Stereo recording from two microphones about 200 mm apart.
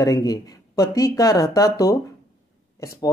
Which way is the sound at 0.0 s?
20° left (ahead or behind).